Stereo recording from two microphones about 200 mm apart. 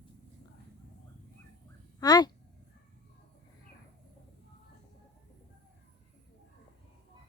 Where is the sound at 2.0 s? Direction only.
20° left (ahead or behind).